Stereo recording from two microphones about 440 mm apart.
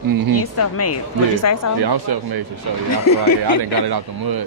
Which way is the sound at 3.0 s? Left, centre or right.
Left.